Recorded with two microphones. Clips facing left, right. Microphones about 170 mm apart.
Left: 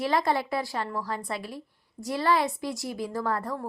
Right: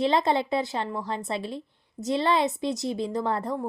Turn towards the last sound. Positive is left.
turn(degrees=-20)  # may be behind; listen again after turning